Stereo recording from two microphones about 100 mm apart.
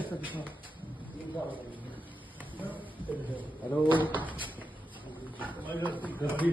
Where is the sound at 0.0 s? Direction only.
15° right (ahead or behind).